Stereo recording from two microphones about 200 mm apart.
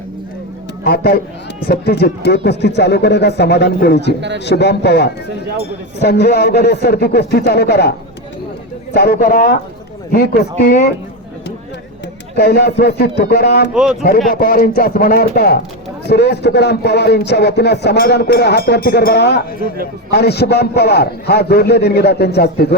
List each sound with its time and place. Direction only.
0.9 s a man's voice: 50° left (ahead or behind)
12.4 s a man's voice: 55° left (ahead or behind)